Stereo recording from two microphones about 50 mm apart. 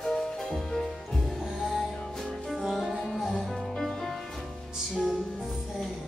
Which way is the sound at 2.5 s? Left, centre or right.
Centre.